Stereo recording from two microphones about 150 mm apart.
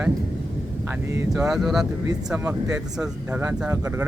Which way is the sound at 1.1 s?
20° right (ahead or behind).